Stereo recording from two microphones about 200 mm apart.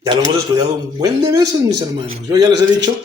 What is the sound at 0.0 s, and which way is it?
Speech, 20° right (ahead or behind).